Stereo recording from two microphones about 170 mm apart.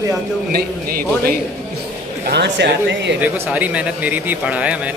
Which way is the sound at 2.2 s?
85° right.